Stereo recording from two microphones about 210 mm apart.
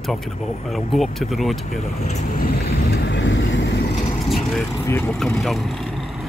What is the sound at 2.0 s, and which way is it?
Vehicle, 40° left (ahead or behind).